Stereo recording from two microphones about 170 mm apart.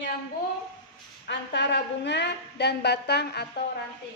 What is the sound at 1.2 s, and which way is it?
A woman's voice, 90° left.